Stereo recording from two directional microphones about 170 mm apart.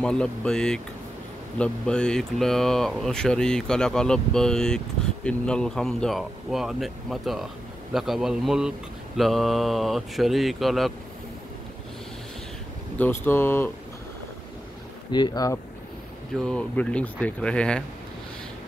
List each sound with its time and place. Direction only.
0.0 s speech: 5° left (ahead or behind)
12.9 s speech: 10° left (ahead or behind)
15.0 s speech: 25° left (ahead or behind)
16.3 s speech: 5° left (ahead or behind)